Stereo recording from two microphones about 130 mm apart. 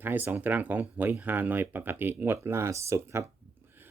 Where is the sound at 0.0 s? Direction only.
15° right (ahead or behind).